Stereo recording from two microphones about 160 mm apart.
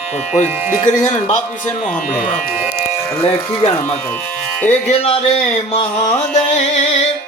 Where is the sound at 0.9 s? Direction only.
45° left (ahead or behind).